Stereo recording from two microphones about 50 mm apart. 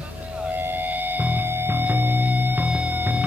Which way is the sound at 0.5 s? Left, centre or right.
Right.